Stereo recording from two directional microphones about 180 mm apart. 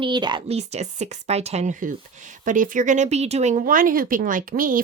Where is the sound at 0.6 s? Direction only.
35° right (ahead or behind).